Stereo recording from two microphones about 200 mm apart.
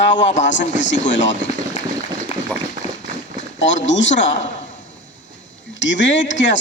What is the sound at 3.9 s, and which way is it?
Speech, 65° left (ahead or behind).